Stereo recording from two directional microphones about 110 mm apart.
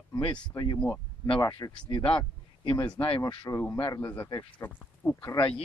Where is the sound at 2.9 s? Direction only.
55° left (ahead or behind).